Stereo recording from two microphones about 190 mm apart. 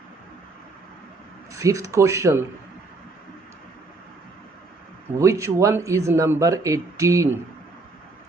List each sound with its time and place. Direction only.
1.5 s speech: 15° right (ahead or behind)
5.1 s speech: 15° right (ahead or behind)